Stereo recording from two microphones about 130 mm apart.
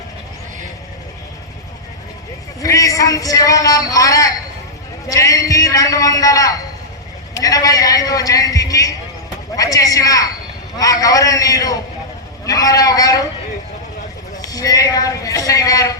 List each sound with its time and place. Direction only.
2.6 s a man's voice: 25° left (ahead or behind)
14.4 s speech: 25° left (ahead or behind)